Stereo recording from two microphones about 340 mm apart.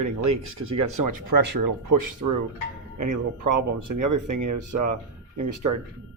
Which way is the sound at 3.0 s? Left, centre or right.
Right.